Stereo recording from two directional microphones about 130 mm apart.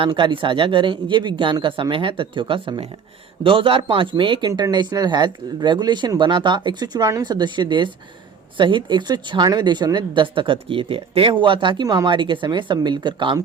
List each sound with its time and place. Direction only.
0.0 s speech: 40° right (ahead or behind)